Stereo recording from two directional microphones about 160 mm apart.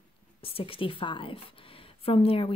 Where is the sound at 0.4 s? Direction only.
35° left (ahead or behind).